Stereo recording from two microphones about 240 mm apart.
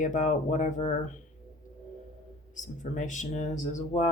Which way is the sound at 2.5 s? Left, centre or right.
Left.